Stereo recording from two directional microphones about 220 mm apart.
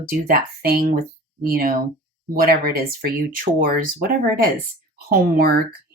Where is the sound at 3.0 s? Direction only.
40° right (ahead or behind).